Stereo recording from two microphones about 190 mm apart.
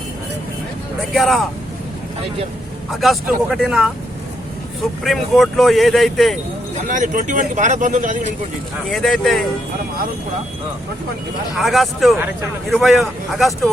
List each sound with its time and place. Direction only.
1.1 s speech: centre (ahead or behind)
2.9 s speech: centre (ahead or behind)
6.8 s speech: 40° right (ahead or behind)
8.9 s speech: centre (ahead or behind)
11.5 s speech: centre (ahead or behind)